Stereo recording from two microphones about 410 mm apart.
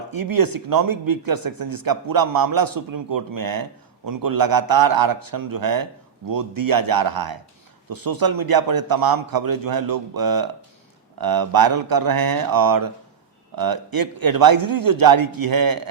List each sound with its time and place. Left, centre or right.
0.1 s speech: right